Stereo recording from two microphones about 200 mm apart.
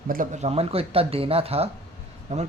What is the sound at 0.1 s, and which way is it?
Speech, 40° right (ahead or behind).